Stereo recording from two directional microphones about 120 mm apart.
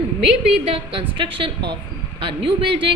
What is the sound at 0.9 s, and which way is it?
A woman's voice, 45° right (ahead or behind).